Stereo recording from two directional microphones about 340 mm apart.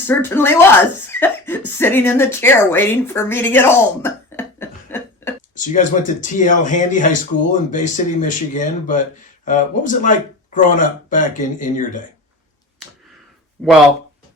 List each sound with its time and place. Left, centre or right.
0.1 s speech: centre
5.5 s speech: left
13.6 s speech: centre